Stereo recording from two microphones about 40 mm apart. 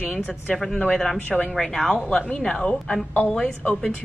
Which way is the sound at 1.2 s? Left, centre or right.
Left.